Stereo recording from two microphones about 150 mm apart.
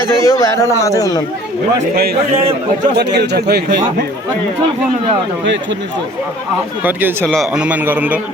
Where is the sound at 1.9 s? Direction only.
90° right.